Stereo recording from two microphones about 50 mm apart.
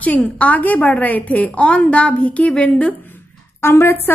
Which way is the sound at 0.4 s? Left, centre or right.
Left.